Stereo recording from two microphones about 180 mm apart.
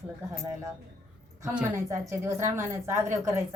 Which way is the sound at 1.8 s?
15° right (ahead or behind).